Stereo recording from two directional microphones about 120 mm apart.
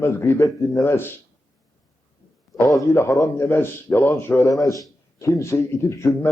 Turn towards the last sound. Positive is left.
turn(degrees=25)  # may be behind; listen again after turning